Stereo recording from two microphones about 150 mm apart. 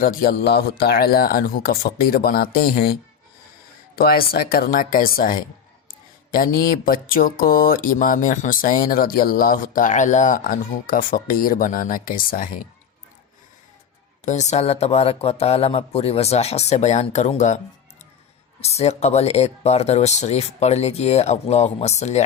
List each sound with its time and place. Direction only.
0.0 s speech: 70° left (ahead or behind)
14.3 s speech: 50° left (ahead or behind)
18.6 s speech: 45° left (ahead or behind)